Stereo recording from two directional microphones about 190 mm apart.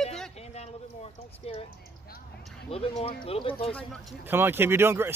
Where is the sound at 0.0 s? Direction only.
Centre (ahead or behind).